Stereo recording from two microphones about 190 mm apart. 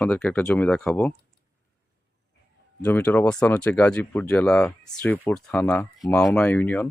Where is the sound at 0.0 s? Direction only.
5° left (ahead or behind).